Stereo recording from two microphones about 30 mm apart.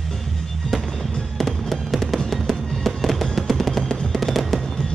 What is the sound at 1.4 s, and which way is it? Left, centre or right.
Fireworks, centre.